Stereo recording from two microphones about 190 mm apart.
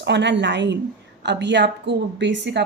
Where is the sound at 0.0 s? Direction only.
65° right (ahead or behind).